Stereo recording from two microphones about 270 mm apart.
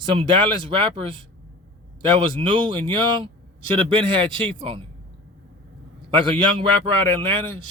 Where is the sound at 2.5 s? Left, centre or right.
Centre.